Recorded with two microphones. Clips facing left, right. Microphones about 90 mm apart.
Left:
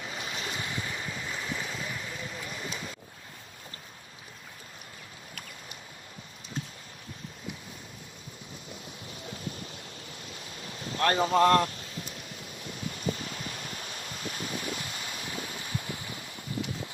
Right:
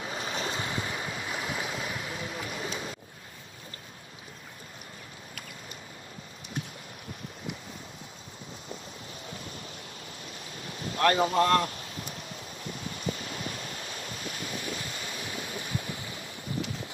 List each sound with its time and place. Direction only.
0.0 s waves: 30° right (ahead or behind)
2.0 s a sound: 30° right (ahead or behind)
9.2 s a sound: 35° left (ahead or behind)
9.7 s waves: 35° right (ahead or behind)
10.8 s boat: 35° left (ahead or behind)
11.3 s speech: 35° left (ahead or behind)
11.9 s a sound: 35° right (ahead or behind)
14.3 s waves: 35° left (ahead or behind)
14.8 s stream: 35° right (ahead or behind)